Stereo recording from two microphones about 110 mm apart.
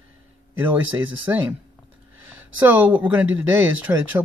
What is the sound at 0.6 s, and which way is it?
Speech, 15° right (ahead or behind).